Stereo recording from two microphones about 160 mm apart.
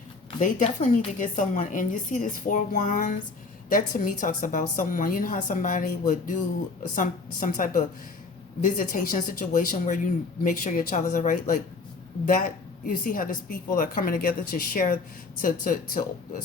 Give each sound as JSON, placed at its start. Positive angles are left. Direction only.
{"t": 0.3, "sound": "a woman's voice", "side_deg": 55}